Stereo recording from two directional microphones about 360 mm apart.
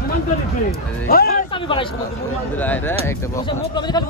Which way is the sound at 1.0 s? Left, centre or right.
Left.